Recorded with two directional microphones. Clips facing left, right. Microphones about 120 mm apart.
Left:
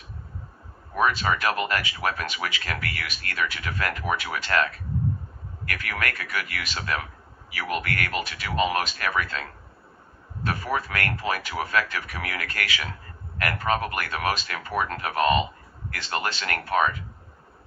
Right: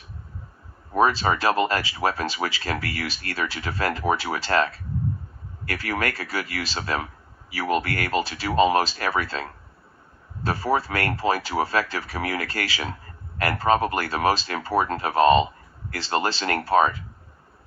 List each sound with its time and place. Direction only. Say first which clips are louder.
0.9 s speech: right 3 dB; 30° right (ahead or behind)